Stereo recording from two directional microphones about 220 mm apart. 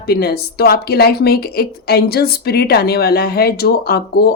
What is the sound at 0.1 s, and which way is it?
A woman's voice, 45° left (ahead or behind).